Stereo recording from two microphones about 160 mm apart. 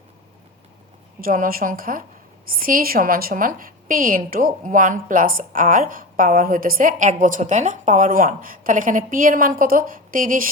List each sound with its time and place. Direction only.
1.2 s a woman's voice: 60° right (ahead or behind)